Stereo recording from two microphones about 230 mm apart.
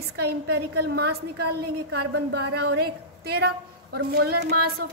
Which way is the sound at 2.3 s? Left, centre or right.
Right.